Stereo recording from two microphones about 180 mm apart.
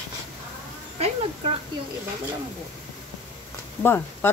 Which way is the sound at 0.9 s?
35° right (ahead or behind).